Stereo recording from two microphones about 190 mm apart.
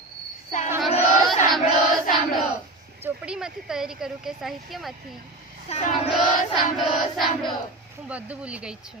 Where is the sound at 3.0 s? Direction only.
5° right (ahead or behind).